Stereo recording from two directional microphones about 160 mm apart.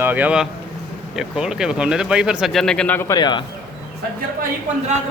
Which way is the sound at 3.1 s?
25° left (ahead or behind).